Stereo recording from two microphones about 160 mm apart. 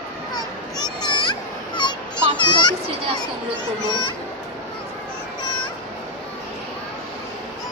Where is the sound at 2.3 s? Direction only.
30° left (ahead or behind).